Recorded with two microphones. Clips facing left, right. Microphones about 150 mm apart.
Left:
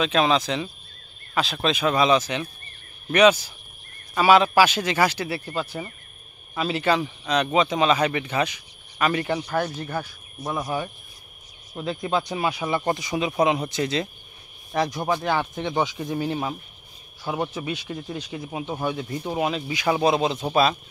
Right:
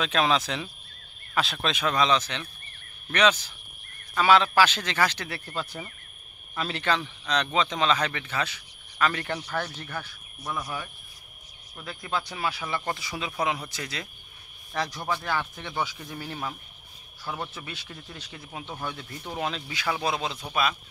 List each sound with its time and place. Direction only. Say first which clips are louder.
0.0 s speech: left 4 dB; centre (ahead or behind)
9.8 s speech: left 7 dB; 30° left (ahead or behind)